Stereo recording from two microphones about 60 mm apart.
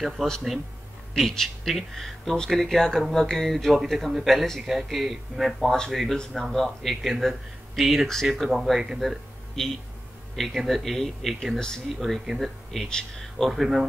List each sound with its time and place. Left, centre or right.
0.2 s speech: centre